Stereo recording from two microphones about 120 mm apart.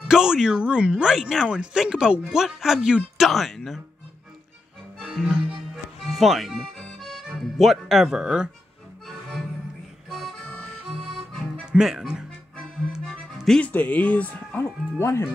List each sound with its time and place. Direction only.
0.1 s speech: 5° right (ahead or behind)
5.0 s music: 5° right (ahead or behind)
11.6 s speech: 5° right (ahead or behind)
12.9 s music: centre (ahead or behind)
13.7 s speech: 15° left (ahead or behind)